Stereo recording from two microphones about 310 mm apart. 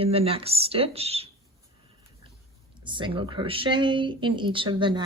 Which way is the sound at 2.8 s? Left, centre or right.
Centre.